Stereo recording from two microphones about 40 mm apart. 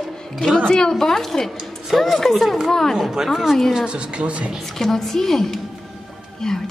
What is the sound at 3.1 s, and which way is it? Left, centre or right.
Speech, centre.